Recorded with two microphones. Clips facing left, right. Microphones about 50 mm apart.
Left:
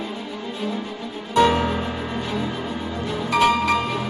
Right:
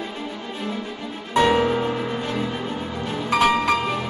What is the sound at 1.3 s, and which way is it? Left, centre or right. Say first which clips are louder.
Music: left 1 dB; centre.